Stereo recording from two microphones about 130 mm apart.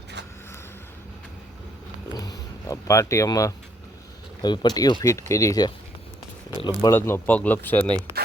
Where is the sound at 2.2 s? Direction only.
25° left (ahead or behind).